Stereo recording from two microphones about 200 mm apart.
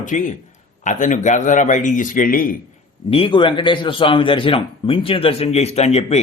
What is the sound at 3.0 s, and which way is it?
A man's voice, 25° left (ahead or behind).